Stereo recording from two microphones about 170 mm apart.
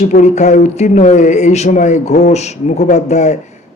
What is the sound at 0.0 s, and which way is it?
Speech, 45° left (ahead or behind).